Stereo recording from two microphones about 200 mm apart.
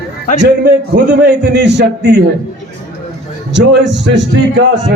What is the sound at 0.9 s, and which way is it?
Speech, 55° right (ahead or behind).